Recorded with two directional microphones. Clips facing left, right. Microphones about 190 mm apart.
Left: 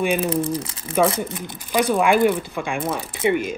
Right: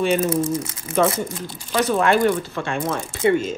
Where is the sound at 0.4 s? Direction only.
30° left (ahead or behind).